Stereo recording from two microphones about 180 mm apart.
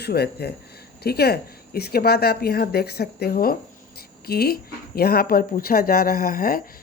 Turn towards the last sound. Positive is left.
turn(degrees=50)  # may be behind; listen again after turning